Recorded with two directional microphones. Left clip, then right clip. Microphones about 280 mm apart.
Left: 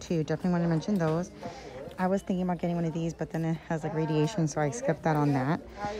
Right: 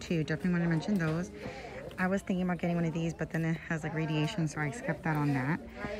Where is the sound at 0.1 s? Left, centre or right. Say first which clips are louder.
Left 4 dB; centre.